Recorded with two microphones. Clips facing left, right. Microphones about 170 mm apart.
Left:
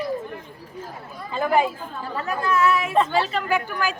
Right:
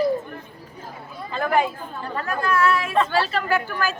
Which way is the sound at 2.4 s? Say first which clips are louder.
Even; 20° left (ahead or behind).